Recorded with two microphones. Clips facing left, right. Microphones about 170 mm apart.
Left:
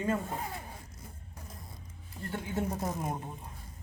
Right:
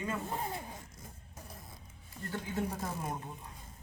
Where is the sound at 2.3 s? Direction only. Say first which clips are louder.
Left 2 dB; 25° left (ahead or behind).